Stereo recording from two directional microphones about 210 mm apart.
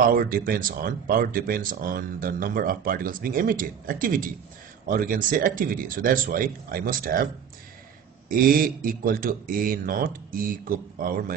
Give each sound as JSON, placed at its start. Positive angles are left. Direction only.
{"t": 0.0, "sound": "speech", "side_deg": -45}
{"t": 8.3, "sound": "speech", "side_deg": -45}